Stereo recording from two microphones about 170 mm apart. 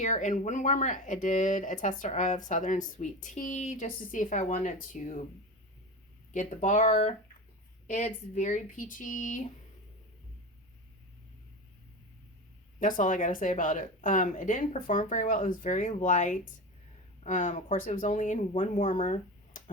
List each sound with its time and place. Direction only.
0.0 s speech: 45° left (ahead or behind)
6.3 s speech: 45° left (ahead or behind)
12.8 s speech: 50° left (ahead or behind)